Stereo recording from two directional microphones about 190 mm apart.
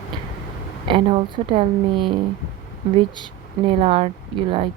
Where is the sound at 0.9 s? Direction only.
30° right (ahead or behind).